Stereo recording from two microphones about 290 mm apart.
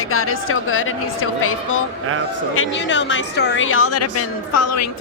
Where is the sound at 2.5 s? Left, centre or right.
Left.